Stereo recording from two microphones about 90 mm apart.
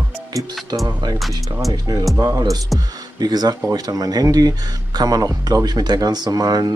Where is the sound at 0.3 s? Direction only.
40° right (ahead or behind).